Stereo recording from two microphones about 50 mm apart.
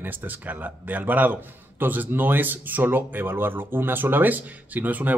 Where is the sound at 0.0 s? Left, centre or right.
Right.